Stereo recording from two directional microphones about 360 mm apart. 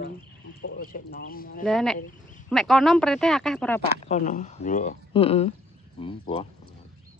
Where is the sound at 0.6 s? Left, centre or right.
Left.